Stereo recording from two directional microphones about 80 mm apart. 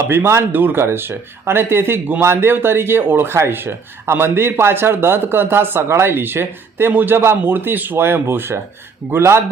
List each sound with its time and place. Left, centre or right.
0.1 s speech: right